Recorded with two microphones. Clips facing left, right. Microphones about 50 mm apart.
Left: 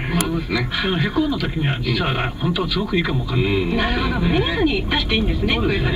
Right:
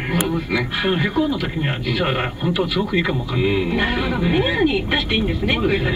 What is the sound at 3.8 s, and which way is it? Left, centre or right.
Speech, right.